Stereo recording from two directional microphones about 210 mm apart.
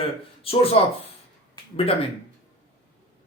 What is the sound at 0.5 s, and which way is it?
Speech, 25° left (ahead or behind).